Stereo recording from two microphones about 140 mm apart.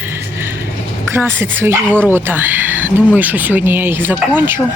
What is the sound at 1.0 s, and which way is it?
Speech, 15° right (ahead or behind).